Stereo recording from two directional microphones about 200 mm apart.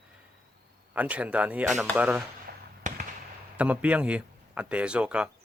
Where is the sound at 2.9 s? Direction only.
40° right (ahead or behind).